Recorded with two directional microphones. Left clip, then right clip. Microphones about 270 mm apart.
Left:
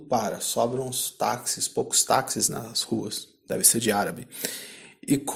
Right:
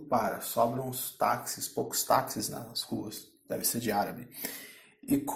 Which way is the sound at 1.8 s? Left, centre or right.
Left.